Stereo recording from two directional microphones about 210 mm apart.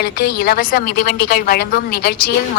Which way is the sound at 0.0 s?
50° left (ahead or behind).